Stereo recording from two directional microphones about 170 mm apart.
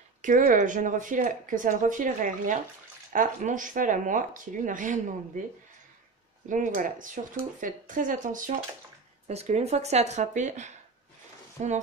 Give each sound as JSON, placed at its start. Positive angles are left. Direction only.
{"t": 0.2, "sound": "speech", "side_deg": -50}
{"t": 6.5, "sound": "speech", "side_deg": -50}
{"t": 9.3, "sound": "speech", "side_deg": -40}